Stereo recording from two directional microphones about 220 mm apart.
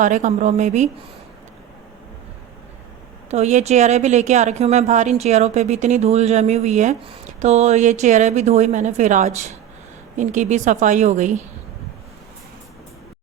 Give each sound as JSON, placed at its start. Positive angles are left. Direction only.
{"t": 0.0, "sound": "speech", "side_deg": -35}
{"t": 3.2, "sound": "speech", "side_deg": -30}